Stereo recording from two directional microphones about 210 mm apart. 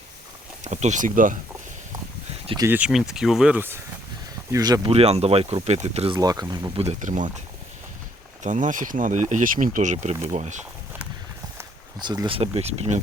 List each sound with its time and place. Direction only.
0.6 s speech: 35° right (ahead or behind)
2.6 s speech: 5° right (ahead or behind)
4.5 s speech: 20° right (ahead or behind)
6.1 s speech: 15° right (ahead or behind)
6.8 s speech: 35° right (ahead or behind)
8.4 s speech: 35° right (ahead or behind)
11.5 s speech: 20° right (ahead or behind)